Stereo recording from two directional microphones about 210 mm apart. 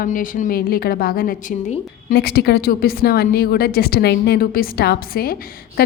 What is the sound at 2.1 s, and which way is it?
A woman's voice, 50° left (ahead or behind).